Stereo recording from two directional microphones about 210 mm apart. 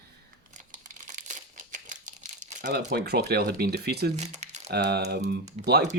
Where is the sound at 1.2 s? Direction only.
35° right (ahead or behind).